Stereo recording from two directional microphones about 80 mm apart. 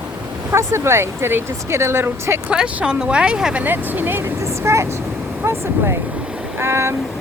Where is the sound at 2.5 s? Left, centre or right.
Centre.